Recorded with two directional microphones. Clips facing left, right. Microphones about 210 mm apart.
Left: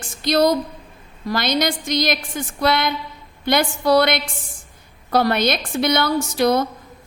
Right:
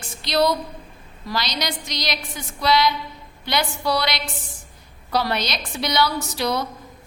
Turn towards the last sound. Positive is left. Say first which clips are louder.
# left 7 dB
turn(degrees=50)  # may be behind; listen again after turning